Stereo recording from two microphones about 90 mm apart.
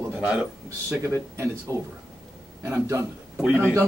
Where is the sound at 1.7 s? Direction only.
35° right (ahead or behind).